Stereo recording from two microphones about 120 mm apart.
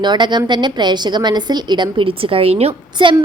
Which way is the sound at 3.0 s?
40° right (ahead or behind).